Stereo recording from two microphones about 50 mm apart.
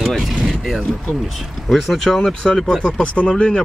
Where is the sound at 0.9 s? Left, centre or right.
Centre.